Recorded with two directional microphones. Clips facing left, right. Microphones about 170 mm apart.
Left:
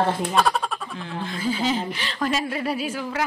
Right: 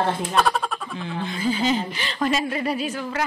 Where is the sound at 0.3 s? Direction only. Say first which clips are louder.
Even; centre (ahead or behind).